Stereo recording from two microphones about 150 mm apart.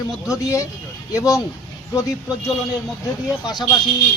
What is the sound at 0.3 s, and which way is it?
Speech, 20° left (ahead or behind).